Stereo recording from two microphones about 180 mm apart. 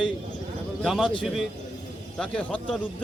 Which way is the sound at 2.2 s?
5° left (ahead or behind).